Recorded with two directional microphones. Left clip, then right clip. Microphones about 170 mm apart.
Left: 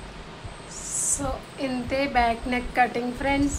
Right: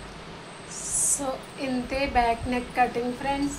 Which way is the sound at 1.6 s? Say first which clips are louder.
Left 2 dB; 20° left (ahead or behind).